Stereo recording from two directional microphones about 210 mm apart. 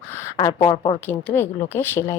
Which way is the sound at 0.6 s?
20° left (ahead or behind).